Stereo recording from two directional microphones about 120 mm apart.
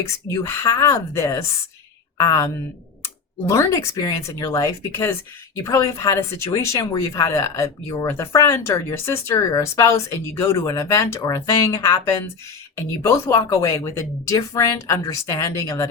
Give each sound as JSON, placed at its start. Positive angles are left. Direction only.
{"t": 0.0, "sound": "speech", "side_deg": 25}